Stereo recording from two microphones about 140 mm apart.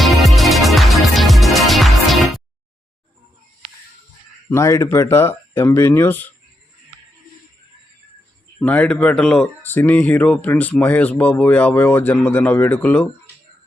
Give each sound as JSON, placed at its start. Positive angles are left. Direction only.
{"t": 0.0, "sound": "music", "side_deg": 0}
{"t": 4.4, "sound": "speech", "side_deg": 20}
{"t": 8.5, "sound": "speech", "side_deg": 10}